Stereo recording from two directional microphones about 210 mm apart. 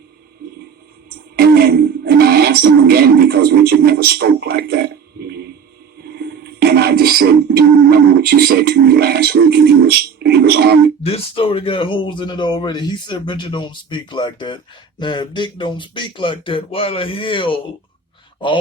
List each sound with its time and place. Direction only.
1.4 s speech: 50° right (ahead or behind)
6.7 s speech: 50° right (ahead or behind)
11.0 s speech: 25° left (ahead or behind)